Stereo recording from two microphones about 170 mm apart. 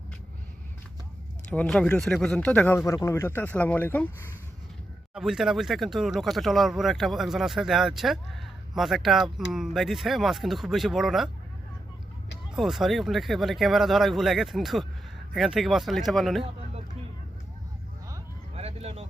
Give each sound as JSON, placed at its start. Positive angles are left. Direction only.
{"t": 1.5, "sound": "speech", "side_deg": 5}
{"t": 5.1, "sound": "speech", "side_deg": -5}
{"t": 12.5, "sound": "speech", "side_deg": 0}
{"t": 18.5, "sound": "a sound", "side_deg": -35}